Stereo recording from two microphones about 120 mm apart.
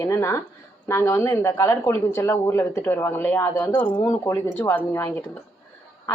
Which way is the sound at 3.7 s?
40° left (ahead or behind).